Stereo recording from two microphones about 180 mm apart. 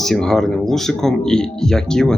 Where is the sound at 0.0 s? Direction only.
Centre (ahead or behind).